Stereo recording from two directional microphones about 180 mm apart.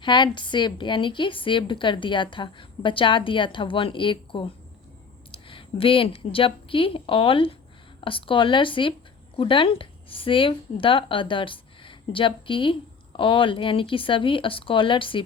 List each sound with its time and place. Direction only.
0.0 s a woman's voice: 25° left (ahead or behind)